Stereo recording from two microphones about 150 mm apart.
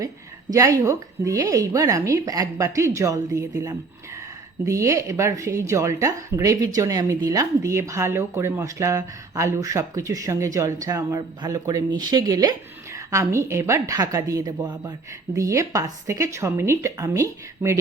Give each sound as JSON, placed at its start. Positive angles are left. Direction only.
{"t": 0.5, "sound": "speech", "side_deg": -20}